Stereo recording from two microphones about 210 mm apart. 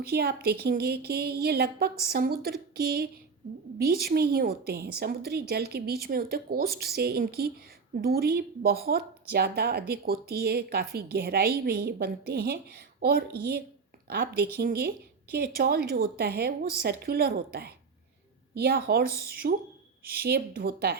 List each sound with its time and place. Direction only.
0.1 s speech: 50° right (ahead or behind)